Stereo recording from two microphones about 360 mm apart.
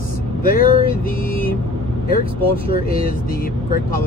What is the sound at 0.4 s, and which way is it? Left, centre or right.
Speech, left.